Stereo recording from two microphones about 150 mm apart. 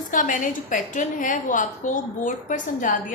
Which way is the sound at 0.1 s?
60° left (ahead or behind).